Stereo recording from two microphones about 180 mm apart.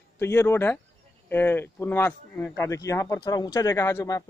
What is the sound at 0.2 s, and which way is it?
Speech, 15° left (ahead or behind).